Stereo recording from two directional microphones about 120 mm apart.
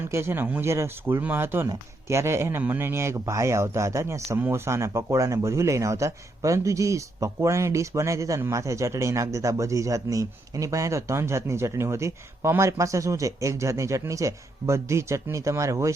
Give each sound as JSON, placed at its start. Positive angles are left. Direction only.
{"t": 0.1, "sound": "speech", "side_deg": -20}